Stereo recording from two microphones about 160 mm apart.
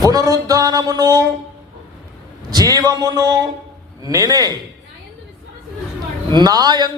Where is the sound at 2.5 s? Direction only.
25° right (ahead or behind).